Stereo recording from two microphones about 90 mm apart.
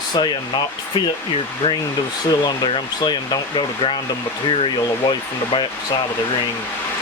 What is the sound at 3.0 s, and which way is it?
Speech, 60° left (ahead or behind).